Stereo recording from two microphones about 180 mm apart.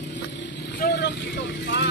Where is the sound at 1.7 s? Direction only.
85° left.